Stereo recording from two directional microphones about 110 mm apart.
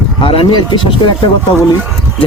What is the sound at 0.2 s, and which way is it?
Speech, 50° left (ahead or behind).